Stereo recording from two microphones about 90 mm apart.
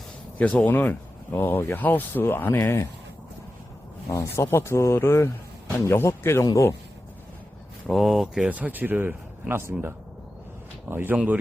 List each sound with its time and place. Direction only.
0.3 s speech: 15° left (ahead or behind)
4.1 s speech: 30° left (ahead or behind)
6.4 s speech: 40° left (ahead or behind)
7.9 s speech: centre (ahead or behind)
8.4 s speech: 15° right (ahead or behind)
10.8 s speech: 25° right (ahead or behind)